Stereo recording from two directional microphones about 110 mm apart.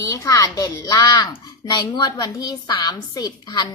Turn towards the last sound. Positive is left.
turn(degrees=40)  # may be behind; listen again after turning